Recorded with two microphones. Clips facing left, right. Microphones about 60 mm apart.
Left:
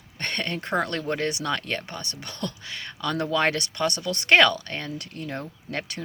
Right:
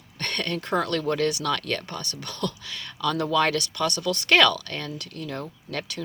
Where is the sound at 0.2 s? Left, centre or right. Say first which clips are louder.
Even; left.